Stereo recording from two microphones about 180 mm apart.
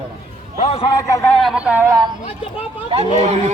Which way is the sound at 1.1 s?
10° left (ahead or behind).